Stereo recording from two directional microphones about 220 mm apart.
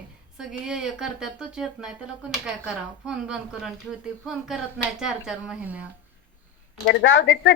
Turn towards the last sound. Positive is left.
turn(degrees=60)  # may be behind; listen again after turning